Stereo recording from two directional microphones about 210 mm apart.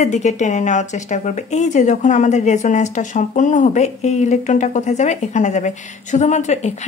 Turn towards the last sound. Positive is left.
turn(degrees=35)  # may be behind; listen again after turning